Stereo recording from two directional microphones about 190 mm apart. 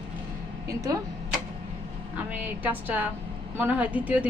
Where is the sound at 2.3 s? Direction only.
10° right (ahead or behind).